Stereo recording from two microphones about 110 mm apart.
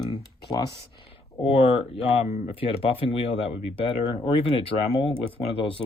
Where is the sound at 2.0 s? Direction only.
80° left.